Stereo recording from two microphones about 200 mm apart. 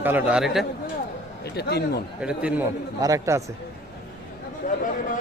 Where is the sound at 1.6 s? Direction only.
55° left (ahead or behind).